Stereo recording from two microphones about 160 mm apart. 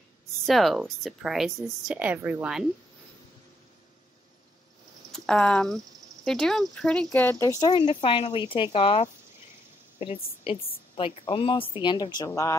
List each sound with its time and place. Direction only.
0.5 s a woman's voice: centre (ahead or behind)
5.1 s a woman's voice: 5° left (ahead or behind)
7.1 s speech: 15° left (ahead or behind)
7.8 s a woman's voice: 35° left (ahead or behind); by 12.5 s 20° left (ahead or behind)